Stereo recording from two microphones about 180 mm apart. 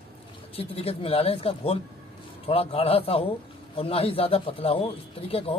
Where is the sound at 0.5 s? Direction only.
35° left (ahead or behind).